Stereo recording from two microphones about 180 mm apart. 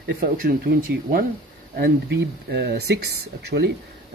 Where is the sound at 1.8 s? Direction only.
65° right (ahead or behind).